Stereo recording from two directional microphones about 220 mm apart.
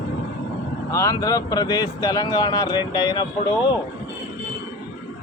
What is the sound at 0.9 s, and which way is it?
Speech, 15° left (ahead or behind).